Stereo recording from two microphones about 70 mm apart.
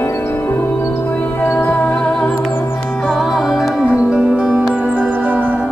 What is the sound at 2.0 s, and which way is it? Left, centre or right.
Music, centre.